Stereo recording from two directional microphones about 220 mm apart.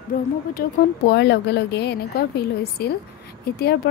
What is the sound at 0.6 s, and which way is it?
Speech, 50° left (ahead or behind).